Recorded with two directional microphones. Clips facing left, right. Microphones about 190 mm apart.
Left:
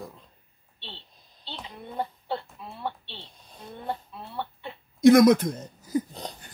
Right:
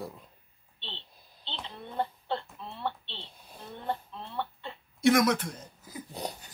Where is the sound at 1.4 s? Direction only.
10° left (ahead or behind).